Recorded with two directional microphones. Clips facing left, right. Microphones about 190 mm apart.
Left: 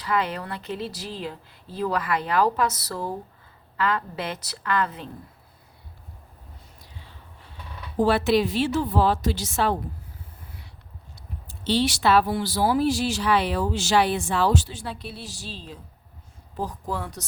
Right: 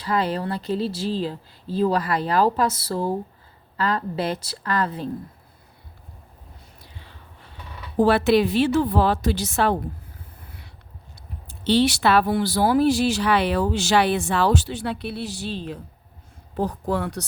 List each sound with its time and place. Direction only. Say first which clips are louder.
0.0 s speech: right 3 dB; 35° right (ahead or behind)
8.0 s speech: right 3 dB; 60° right (ahead or behind)
11.1 s speech: even; 60° right (ahead or behind)